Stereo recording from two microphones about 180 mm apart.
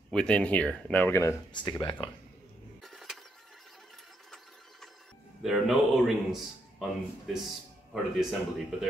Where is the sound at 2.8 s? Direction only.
Centre (ahead or behind).